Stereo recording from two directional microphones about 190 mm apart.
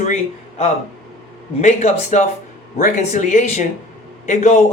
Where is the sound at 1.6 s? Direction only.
35° left (ahead or behind).